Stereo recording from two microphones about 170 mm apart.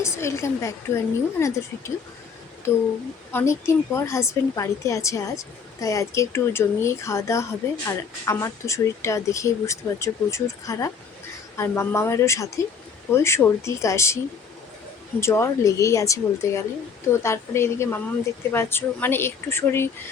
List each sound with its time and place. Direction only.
0.0 s speech: 15° left (ahead or behind)
15.2 s speech: 15° left (ahead or behind)